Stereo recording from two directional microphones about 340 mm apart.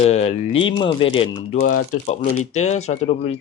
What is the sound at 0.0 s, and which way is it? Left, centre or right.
Speech, centre.